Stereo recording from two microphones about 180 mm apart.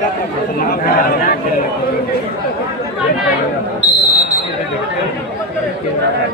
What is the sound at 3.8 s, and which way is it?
Basketball bounce, 40° right (ahead or behind).